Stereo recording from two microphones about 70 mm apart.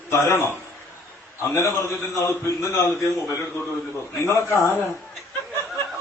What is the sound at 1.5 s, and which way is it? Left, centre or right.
A man's voice, left.